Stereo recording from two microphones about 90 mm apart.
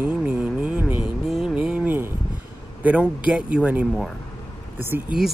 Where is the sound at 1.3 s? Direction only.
10° right (ahead or behind).